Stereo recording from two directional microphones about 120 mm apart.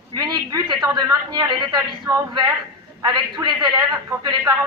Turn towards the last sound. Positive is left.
turn(degrees=-30)  # may be behind; listen again after turning